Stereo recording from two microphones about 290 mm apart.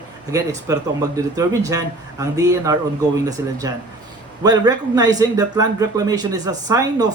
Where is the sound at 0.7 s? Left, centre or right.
Centre.